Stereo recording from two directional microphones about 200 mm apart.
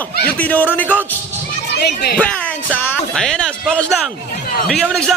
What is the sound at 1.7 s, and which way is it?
Speech, 55° left (ahead or behind).